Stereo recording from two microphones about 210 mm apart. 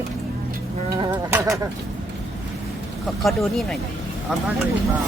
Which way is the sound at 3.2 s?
Centre (ahead or behind).